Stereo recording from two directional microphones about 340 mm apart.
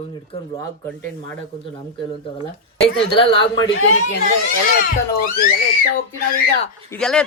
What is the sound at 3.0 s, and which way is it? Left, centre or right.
Speech, centre.